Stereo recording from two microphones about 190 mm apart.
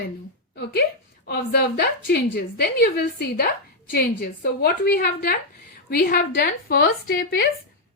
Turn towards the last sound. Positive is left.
turn(degrees=50)  # may be behind; listen again after turning